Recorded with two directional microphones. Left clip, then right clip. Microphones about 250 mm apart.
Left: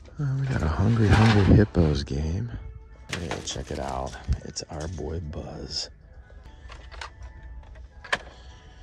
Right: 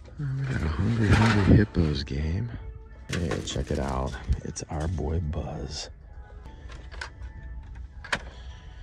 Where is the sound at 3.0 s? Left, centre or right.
Centre.